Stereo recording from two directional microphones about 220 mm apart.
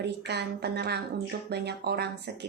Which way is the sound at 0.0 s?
50° right (ahead or behind).